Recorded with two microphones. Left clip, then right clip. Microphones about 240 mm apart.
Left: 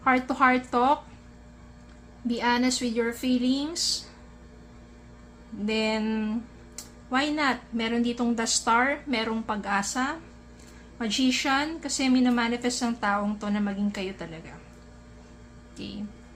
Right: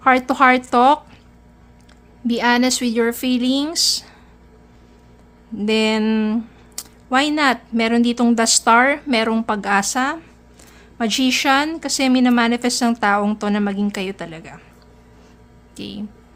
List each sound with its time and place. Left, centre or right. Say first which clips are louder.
0.0 s speech: right 8 dB; right
2.2 s speech: right 8 dB; right
5.6 s speech: right 9 dB; right
15.7 s speech: right 7 dB; right